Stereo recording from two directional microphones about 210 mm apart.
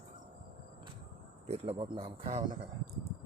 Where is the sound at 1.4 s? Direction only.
30° right (ahead or behind).